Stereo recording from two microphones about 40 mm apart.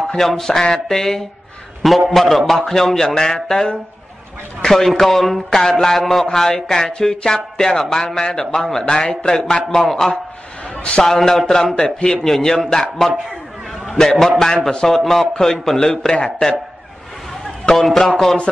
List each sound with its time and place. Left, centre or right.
0.4 s a man's voice: centre
4.6 s a man's voice: centre